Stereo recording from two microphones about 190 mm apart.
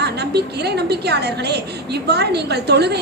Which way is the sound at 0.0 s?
60° right (ahead or behind).